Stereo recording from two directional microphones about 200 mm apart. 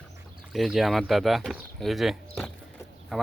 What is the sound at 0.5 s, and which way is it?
Speech, centre (ahead or behind).